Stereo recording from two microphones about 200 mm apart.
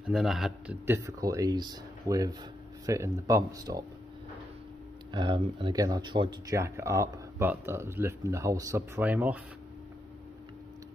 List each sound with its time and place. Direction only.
0.0 s speech: centre (ahead or behind); by 3.8 s 15° right (ahead or behind)
5.1 s speech: 25° right (ahead or behind); by 9.4 s 10° right (ahead or behind)